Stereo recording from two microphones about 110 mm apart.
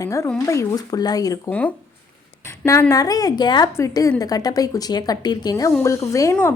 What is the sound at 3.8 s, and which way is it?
A woman's voice, 30° left (ahead or behind).